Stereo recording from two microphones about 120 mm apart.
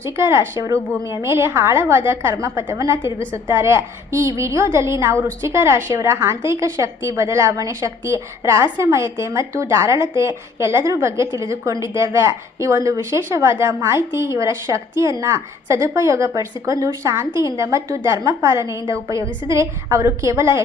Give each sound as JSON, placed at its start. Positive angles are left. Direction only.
{"t": 0.0, "sound": "a woman's voice", "side_deg": -25}